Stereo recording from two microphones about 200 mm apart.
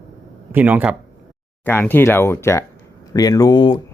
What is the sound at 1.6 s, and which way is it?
Speech, 10° left (ahead or behind).